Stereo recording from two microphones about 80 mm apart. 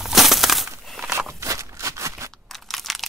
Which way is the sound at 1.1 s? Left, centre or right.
Right.